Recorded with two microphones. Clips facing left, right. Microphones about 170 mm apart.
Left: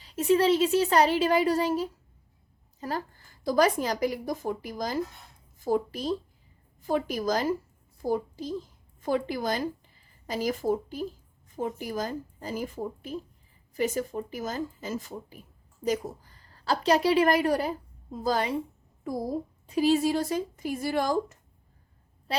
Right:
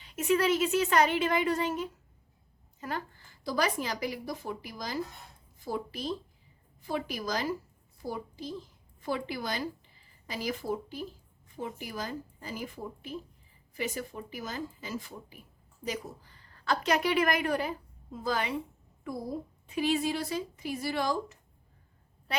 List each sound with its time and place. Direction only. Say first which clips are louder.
0.0 s a woman's voice: left 4 dB; 35° left (ahead or behind)